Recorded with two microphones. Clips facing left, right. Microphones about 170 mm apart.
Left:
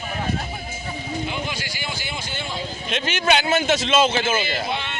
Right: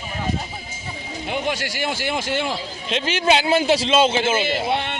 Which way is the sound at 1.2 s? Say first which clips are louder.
Right 4 dB; 60° right (ahead or behind).